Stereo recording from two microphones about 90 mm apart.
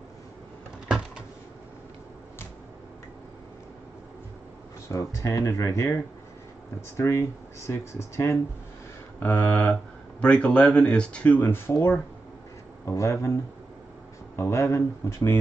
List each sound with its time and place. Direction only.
0.8 s cupboard open or close: 5° right (ahead or behind)
4.8 s speech: 35° left (ahead or behind)
7.0 s speech: 35° left (ahead or behind)
9.2 s speech: 20° left (ahead or behind)
11.4 s speech: 25° left (ahead or behind)
12.8 s speech: 35° left (ahead or behind)